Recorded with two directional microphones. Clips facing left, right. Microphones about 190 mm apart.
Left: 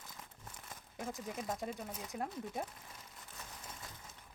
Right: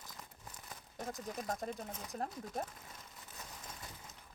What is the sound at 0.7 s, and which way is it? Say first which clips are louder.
Speech: even; 5° left (ahead or behind).